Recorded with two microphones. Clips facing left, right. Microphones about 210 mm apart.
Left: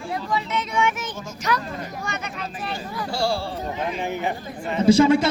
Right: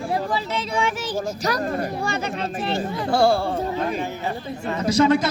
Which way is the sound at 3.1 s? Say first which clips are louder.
Right 7 dB; 55° right (ahead or behind).